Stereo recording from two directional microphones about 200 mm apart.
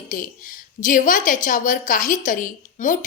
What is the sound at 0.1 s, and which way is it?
A woman's voice, 40° left (ahead or behind).